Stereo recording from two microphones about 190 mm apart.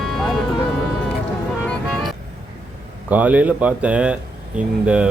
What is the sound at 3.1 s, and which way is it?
Speech, 10° right (ahead or behind).